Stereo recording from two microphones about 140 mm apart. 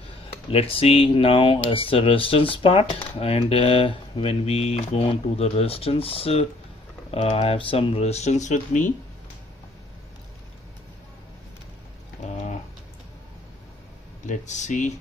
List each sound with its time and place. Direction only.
0.5 s speech: 45° left (ahead or behind); by 8.9 s 60° left (ahead or behind)
12.2 s a sound: 55° left (ahead or behind)
14.2 s speech: 60° left (ahead or behind)